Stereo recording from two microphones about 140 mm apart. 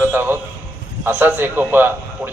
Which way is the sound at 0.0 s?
15° right (ahead or behind).